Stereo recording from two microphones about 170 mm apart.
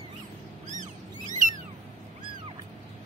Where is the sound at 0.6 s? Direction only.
50° right (ahead or behind).